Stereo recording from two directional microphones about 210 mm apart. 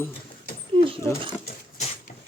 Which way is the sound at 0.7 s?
25° right (ahead or behind).